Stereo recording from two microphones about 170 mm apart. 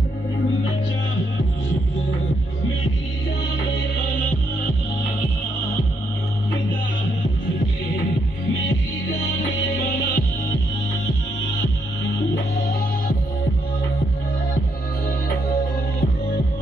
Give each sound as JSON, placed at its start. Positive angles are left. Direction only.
{"t": 9.8, "sound": "music", "side_deg": 75}